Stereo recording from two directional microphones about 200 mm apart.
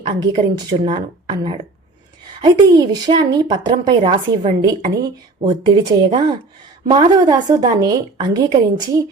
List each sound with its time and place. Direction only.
0.1 s a woman's voice: 20° right (ahead or behind)